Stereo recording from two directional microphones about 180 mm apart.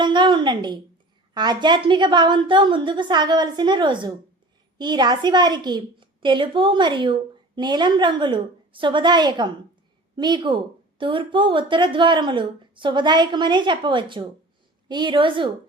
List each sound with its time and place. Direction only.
0.0 s a woman's voice: 25° right (ahead or behind)